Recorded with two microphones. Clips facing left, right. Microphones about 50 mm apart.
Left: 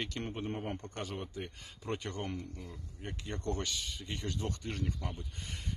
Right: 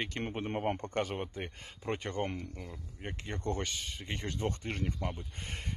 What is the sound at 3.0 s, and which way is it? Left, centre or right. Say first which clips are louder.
Speech: right 1 dB; right.